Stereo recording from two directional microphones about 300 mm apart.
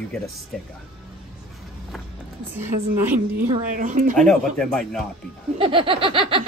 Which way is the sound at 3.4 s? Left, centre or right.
Right.